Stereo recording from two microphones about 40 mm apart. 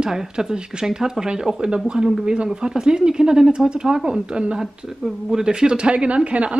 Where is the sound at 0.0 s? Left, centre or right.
Centre.